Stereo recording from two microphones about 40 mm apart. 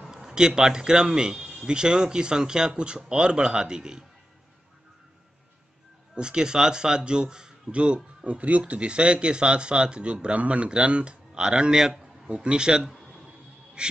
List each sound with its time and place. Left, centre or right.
0.1 s a man's voice: centre
6.1 s speech: right
12.3 s speech: right
12.8 s a sound: centre
13.8 s a man's voice: right